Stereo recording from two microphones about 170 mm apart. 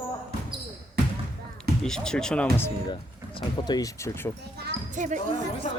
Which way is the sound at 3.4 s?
25° left (ahead or behind).